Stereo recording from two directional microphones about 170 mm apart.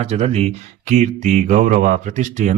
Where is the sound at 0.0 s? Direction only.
40° right (ahead or behind).